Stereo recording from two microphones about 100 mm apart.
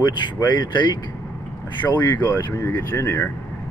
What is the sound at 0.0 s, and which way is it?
Speech, 50° left (ahead or behind).